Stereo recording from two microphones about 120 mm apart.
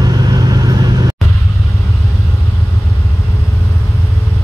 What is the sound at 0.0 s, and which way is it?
Vehicle, 35° right (ahead or behind).